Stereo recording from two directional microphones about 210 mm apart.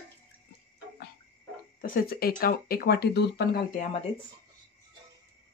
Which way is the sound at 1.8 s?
45° left (ahead or behind).